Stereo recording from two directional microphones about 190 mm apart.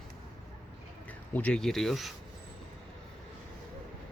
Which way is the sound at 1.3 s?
5° left (ahead or behind).